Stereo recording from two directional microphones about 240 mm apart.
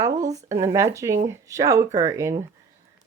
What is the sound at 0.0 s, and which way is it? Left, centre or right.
A woman's voice, centre.